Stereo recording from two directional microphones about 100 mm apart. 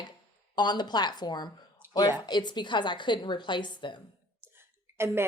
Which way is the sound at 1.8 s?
20° right (ahead or behind).